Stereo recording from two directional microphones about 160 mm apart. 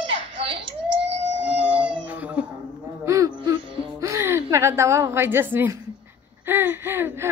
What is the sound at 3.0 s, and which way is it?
Gasp, 20° right (ahead or behind).